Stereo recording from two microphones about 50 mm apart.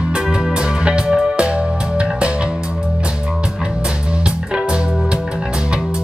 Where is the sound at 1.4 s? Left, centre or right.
Right.